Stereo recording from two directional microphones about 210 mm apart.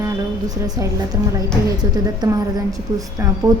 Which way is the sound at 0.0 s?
15° right (ahead or behind).